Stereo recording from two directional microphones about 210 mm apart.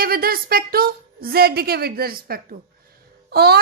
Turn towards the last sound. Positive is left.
turn(degrees=-50)  # may be behind; listen again after turning